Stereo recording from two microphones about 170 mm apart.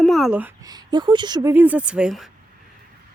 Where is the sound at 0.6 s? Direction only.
20° right (ahead or behind).